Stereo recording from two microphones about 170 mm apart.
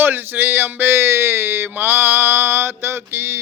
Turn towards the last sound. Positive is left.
turn(degrees=-15)  # may be behind; listen again after turning